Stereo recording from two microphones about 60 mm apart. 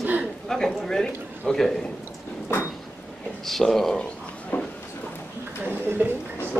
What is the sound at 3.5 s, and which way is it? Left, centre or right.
Speech, centre.